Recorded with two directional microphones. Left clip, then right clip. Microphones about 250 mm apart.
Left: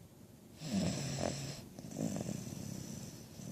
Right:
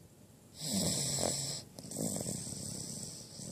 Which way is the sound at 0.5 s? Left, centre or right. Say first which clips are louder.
Right 4 dB; centre.